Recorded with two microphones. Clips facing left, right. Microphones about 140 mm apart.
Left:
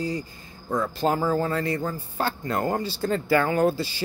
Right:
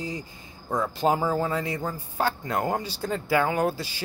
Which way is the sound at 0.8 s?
15° right (ahead or behind).